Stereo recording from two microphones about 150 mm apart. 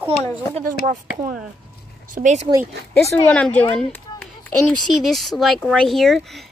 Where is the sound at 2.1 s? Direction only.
55° right (ahead or behind).